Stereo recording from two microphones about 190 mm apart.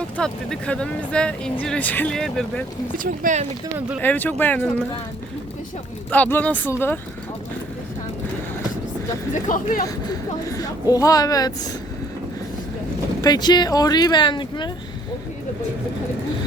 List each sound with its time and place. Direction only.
0.2 s speech: 5° left (ahead or behind)
3.0 s speech: 45° right (ahead or behind)
4.0 s speech: 10° left (ahead or behind)
6.1 s speech: 10° left (ahead or behind)
9.3 s speech: 45° left (ahead or behind)
9.8 s speech: 20° left (ahead or behind)
13.2 s speech: 20° left (ahead or behind)